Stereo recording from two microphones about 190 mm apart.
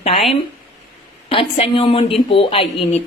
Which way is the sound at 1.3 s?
30° left (ahead or behind).